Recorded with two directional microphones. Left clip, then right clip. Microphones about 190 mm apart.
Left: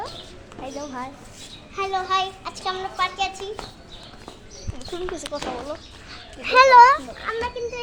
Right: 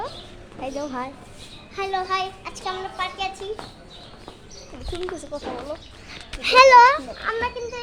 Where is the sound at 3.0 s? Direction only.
20° left (ahead or behind).